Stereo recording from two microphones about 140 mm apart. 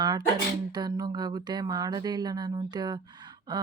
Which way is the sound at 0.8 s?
30° right (ahead or behind).